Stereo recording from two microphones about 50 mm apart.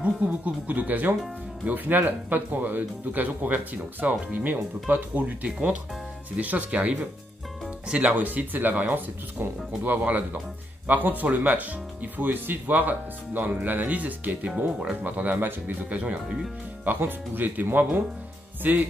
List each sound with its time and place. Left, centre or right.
0.0 s speech: right
5.2 s speech: right
16.8 s speech: right